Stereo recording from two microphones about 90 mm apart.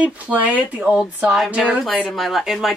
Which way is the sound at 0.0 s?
15° right (ahead or behind).